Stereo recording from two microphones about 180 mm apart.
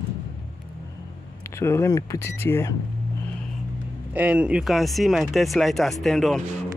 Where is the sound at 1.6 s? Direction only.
15° left (ahead or behind).